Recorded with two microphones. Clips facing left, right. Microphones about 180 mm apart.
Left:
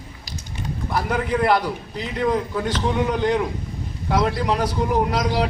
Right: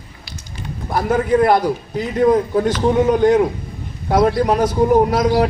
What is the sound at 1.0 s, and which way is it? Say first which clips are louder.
A man's voice: right 7 dB; 45° right (ahead or behind).